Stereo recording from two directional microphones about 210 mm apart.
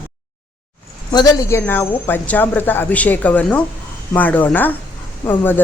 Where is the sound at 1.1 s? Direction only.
15° left (ahead or behind).